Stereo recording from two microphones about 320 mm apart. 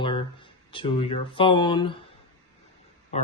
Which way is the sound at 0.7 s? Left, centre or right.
Centre.